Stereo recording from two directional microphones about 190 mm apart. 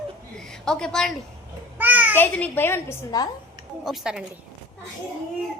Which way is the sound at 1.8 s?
10° right (ahead or behind).